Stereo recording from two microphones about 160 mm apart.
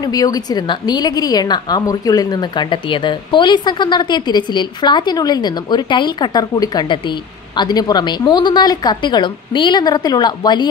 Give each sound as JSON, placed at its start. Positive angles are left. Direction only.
{"t": 0.0, "sound": "a woman's voice", "side_deg": 25}